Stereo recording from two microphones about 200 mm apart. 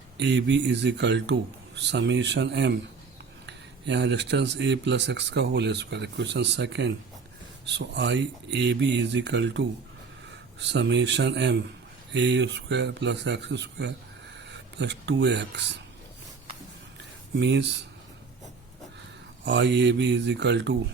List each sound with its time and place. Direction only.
0.2 s speech: 60° right (ahead or behind)
17.4 s speech: 60° right (ahead or behind)
19.5 s speech: 60° right (ahead or behind)